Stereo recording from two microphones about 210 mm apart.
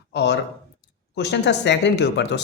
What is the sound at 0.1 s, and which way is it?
Speech, 55° left (ahead or behind).